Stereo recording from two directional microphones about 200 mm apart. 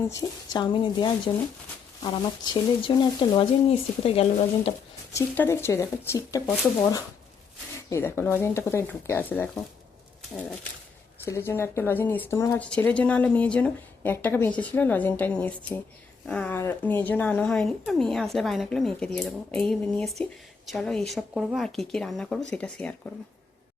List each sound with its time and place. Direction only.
0.1 s speech: 20° left (ahead or behind)
5.1 s speech: 10° left (ahead or behind)
7.9 s speech: 15° left (ahead or behind)
11.3 s speech: 10° left (ahead or behind)